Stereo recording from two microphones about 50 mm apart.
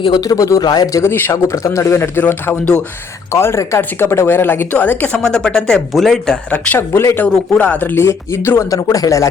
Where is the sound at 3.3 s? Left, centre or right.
Left.